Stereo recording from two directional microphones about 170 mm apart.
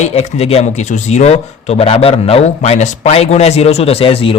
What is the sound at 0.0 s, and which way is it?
A man's voice, 40° left (ahead or behind).